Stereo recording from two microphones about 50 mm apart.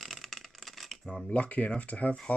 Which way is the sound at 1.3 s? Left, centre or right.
Left.